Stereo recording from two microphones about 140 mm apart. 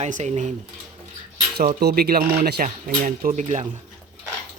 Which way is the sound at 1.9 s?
90° right.